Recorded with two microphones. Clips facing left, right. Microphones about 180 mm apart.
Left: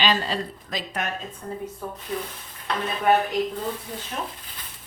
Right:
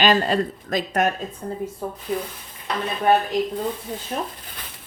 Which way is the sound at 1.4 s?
30° right (ahead or behind).